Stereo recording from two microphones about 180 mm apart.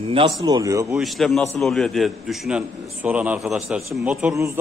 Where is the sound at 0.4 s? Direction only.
20° right (ahead or behind).